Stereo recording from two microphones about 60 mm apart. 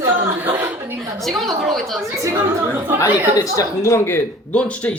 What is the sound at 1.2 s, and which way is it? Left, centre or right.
Speech, centre.